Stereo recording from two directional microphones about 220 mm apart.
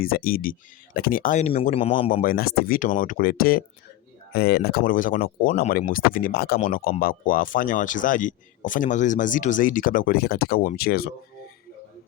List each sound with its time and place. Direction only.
0.0 s speech: 40° left (ahead or behind); by 2.0 s 25° left (ahead or behind)
2.2 s speech: 45° left (ahead or behind)